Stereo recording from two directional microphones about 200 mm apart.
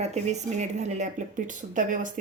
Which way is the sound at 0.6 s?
40° right (ahead or behind).